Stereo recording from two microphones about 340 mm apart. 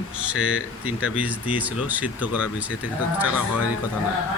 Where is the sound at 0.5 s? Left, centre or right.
Left.